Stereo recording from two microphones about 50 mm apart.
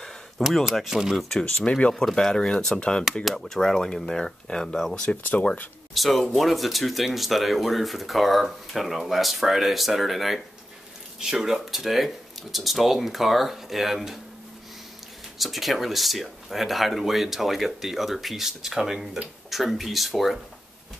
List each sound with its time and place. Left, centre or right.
0.4 s speech: centre
0.9 s speech: centre
1.4 s speech: left
5.0 s speech: left
5.9 s speech: centre
11.1 s speech: centre
15.3 s speech: centre